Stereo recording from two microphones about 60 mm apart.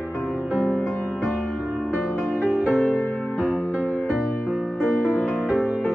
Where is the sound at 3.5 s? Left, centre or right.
Left.